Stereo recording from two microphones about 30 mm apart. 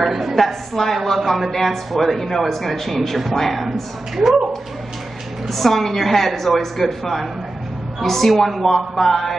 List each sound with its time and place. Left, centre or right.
0.0 s a woman's voice: centre
0.4 s a woman's voice: centre
5.5 s a woman's voice: centre